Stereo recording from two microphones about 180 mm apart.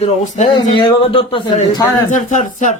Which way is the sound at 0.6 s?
30° left (ahead or behind).